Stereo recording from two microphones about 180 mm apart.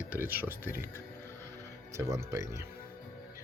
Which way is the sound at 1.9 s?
15° right (ahead or behind).